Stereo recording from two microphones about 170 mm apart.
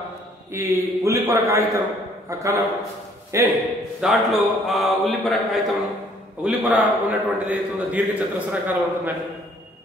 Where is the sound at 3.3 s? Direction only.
15° right (ahead or behind).